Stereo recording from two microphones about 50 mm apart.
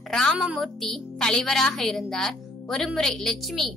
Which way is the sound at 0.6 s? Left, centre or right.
Centre.